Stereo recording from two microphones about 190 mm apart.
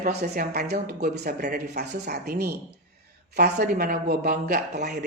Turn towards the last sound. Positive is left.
turn(degrees=-60)  # may be behind; listen again after turning